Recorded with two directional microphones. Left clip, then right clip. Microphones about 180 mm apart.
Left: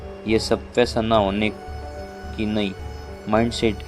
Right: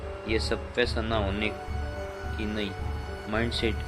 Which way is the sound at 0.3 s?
55° left (ahead or behind).